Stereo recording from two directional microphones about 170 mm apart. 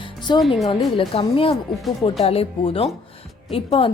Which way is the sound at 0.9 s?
30° left (ahead or behind).